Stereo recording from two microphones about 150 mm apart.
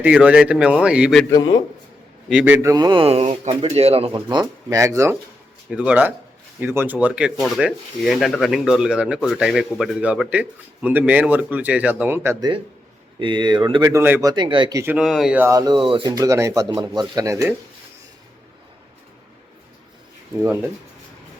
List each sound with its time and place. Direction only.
0.0 s speech: 10° right (ahead or behind)
1.3 s speech: 25° left (ahead or behind)
2.3 s speech: 10° right (ahead or behind); by 4.1 s 40° right (ahead or behind)
4.1 s speech: 30° right (ahead or behind)
5.7 s speech: 10° right (ahead or behind)
13.1 s speech: 30° right (ahead or behind)
13.8 s speech: 15° right (ahead or behind)
14.9 s speech: centre (ahead or behind)
15.4 s speech: 25° right (ahead or behind)